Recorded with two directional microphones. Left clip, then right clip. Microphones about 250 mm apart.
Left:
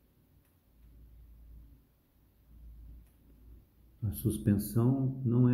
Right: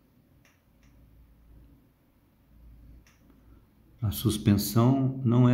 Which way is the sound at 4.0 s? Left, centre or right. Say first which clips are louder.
Right 6 dB; centre.